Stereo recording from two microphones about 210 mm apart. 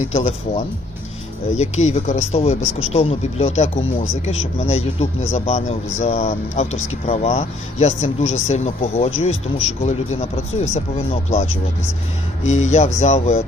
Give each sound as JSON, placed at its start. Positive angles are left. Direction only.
{"t": 0.1, "sound": "speech", "side_deg": 35}